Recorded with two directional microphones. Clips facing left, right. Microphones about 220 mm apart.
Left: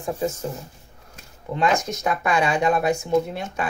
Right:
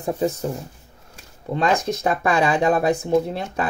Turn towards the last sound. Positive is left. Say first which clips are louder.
# right 2 dB
turn(degrees=-35)  # may be behind; listen again after turning